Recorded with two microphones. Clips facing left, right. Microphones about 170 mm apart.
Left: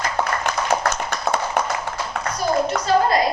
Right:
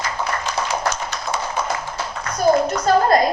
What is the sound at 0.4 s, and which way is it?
Tap, 60° left (ahead or behind).